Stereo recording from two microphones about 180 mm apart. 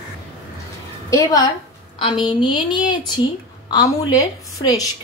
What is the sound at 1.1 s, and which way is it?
A woman's voice, 20° left (ahead or behind).